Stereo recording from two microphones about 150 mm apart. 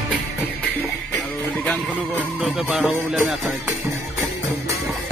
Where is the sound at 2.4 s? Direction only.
5° right (ahead or behind).